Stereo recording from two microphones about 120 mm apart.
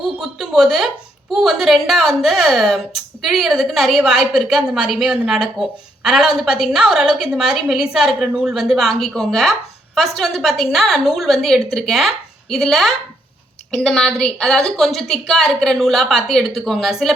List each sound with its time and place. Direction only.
0.2 s a woman's voice: 5° right (ahead or behind)